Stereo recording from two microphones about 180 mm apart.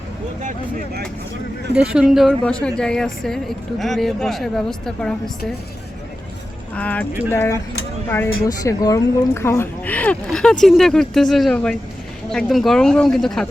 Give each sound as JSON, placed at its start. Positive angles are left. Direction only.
{"t": 1.7, "sound": "speech", "side_deg": -5}
{"t": 6.7, "sound": "speech", "side_deg": 10}